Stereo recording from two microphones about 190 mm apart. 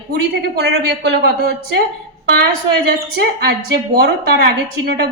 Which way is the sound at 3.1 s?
60° right (ahead or behind).